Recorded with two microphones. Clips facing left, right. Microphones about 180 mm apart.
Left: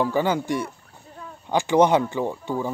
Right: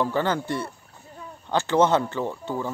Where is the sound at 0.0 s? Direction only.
10° left (ahead or behind).